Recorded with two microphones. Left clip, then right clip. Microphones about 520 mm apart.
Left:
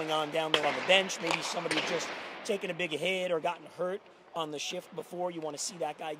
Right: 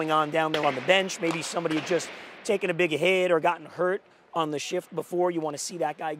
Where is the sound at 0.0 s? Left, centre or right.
Right.